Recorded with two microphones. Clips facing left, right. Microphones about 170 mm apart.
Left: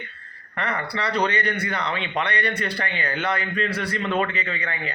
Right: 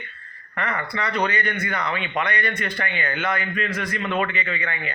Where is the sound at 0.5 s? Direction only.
35° left (ahead or behind).